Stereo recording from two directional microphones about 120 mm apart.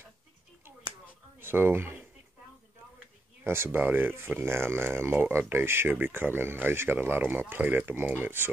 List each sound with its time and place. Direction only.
1.4 s speech: 20° right (ahead or behind)
3.4 s speech: 20° right (ahead or behind)